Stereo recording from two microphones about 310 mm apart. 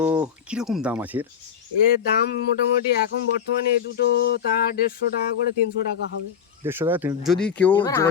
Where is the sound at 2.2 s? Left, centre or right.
Left.